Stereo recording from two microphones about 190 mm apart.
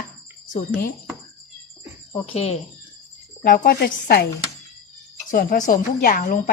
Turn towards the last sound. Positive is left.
turn(degrees=45)  # may be behind; listen again after turning